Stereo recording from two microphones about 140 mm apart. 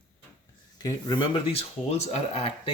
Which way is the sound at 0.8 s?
30° left (ahead or behind).